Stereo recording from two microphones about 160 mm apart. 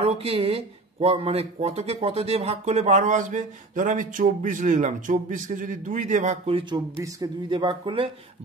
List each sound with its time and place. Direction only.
0.0 s speech: 35° right (ahead or behind)
7.0 s speech: 25° right (ahead or behind)